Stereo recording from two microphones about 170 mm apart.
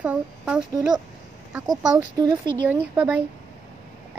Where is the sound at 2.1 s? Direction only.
25° right (ahead or behind).